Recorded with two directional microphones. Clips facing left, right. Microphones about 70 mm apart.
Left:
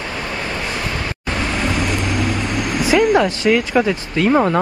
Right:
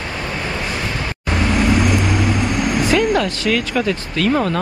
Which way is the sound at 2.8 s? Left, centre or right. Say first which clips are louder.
Left 3 dB; centre.